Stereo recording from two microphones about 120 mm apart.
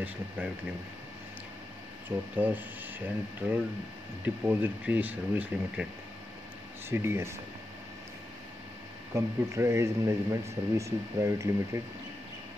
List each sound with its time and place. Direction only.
2.0 s speech: 15° right (ahead or behind)
6.9 s speech: 20° right (ahead or behind)
9.1 s speech: 25° right (ahead or behind)